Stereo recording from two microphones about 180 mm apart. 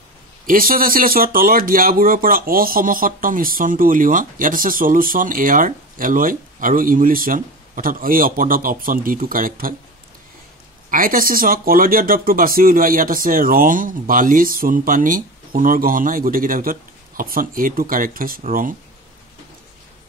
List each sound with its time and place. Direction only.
0.5 s speech: 50° right (ahead or behind)
10.9 s speech: 50° right (ahead or behind)